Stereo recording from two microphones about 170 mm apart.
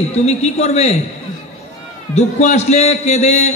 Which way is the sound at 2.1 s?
40° left (ahead or behind).